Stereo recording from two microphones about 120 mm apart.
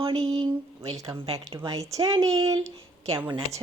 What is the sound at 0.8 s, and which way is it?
Speech, 30° right (ahead or behind).